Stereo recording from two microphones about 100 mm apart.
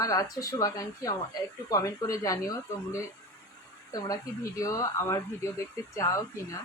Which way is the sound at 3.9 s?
35° left (ahead or behind).